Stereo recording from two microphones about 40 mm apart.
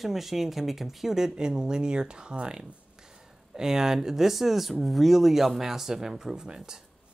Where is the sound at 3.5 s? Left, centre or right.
Centre.